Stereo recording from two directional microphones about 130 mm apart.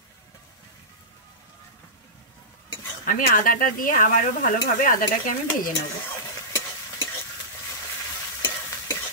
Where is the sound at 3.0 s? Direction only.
90° left.